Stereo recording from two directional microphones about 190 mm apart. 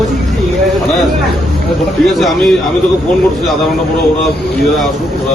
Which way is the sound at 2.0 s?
Centre (ahead or behind).